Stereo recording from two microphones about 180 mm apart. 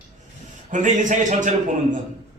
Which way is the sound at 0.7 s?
45° right (ahead or behind).